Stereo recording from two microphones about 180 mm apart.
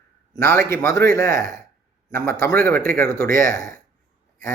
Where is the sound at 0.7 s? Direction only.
15° left (ahead or behind).